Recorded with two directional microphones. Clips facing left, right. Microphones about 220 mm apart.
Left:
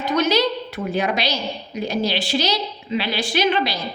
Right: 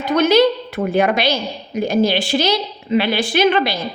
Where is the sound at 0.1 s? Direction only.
55° right (ahead or behind).